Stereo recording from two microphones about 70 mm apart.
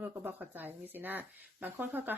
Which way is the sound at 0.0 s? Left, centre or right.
Right.